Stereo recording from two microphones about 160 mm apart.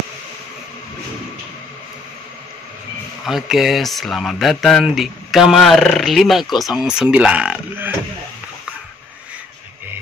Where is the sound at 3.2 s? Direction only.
Centre (ahead or behind).